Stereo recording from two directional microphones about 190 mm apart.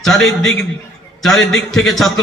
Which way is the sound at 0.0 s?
Centre (ahead or behind).